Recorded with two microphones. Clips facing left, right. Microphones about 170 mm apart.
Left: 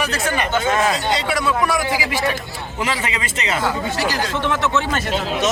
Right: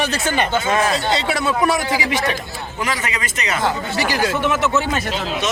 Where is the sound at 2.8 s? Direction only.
25° left (ahead or behind).